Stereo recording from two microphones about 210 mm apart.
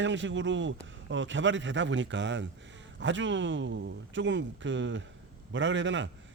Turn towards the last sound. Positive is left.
turn(degrees=-60)  # may be behind; listen again after turning